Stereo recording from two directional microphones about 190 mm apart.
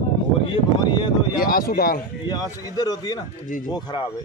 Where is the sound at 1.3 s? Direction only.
50° left (ahead or behind).